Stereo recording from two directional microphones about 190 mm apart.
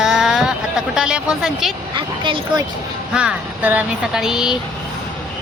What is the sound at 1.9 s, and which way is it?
Speech, 25° right (ahead or behind).